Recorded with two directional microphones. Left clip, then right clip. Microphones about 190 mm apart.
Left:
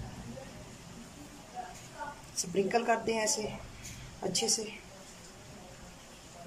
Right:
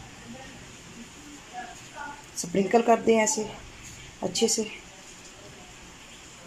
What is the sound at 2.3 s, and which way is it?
Speech, 20° right (ahead or behind).